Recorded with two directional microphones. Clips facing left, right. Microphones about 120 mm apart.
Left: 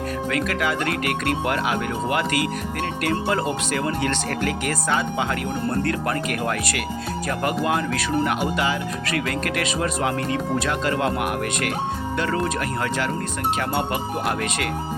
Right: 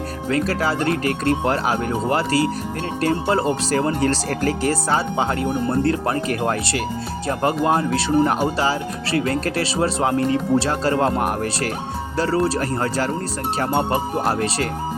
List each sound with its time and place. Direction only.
0.3 s speech: 35° right (ahead or behind)